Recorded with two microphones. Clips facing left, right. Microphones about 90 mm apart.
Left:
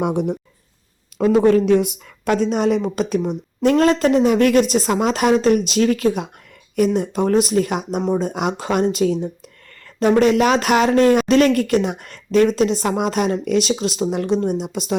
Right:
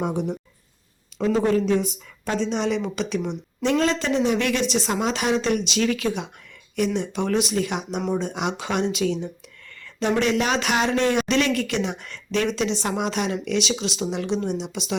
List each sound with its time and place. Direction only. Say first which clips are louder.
0.0 s speech: left 5 dB; 60° left (ahead or behind); by 14.9 s 45° left (ahead or behind)